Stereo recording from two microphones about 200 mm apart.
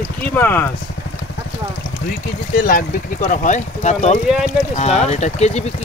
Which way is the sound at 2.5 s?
45° left (ahead or behind).